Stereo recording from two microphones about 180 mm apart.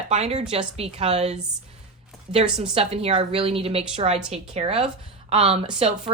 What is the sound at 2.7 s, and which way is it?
A woman's voice, 35° right (ahead or behind).